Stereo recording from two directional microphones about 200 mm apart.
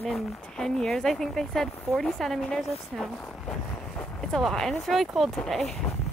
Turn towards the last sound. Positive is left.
turn(degrees=0)  # may be behind; listen again after turning